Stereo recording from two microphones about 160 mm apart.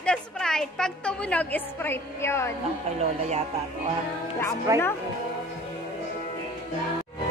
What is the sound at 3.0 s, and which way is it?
Speech, 45° right (ahead or behind).